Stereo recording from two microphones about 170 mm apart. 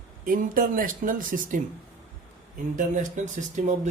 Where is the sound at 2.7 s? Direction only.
50° right (ahead or behind).